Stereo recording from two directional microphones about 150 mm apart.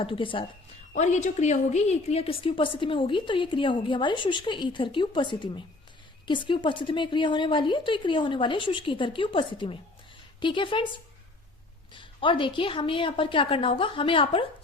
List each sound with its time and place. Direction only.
0.0 s a woman's voice: 35° left (ahead or behind)
0.9 s a woman's voice: 50° left (ahead or behind); by 10.8 s 35° left (ahead or behind)
11.9 s a woman's voice: 35° left (ahead or behind)